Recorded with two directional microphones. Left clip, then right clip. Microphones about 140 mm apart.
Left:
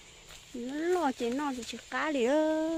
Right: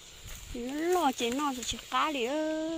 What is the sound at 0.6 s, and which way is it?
Speech, 15° left (ahead or behind).